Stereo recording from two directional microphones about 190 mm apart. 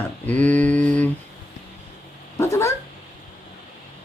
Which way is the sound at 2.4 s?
15° left (ahead or behind).